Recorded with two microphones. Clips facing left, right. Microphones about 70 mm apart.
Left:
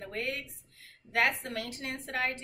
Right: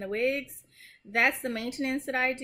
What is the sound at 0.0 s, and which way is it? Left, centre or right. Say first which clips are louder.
A woman's voice: right 8 dB; right.